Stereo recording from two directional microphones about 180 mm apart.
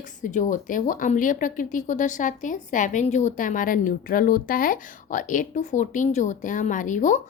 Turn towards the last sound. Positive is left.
turn(degrees=45)  # may be behind; listen again after turning